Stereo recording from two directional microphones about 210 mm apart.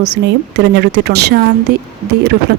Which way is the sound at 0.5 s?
55° right (ahead or behind).